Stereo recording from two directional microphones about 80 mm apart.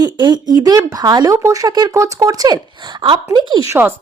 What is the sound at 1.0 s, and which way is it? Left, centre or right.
Speech, right.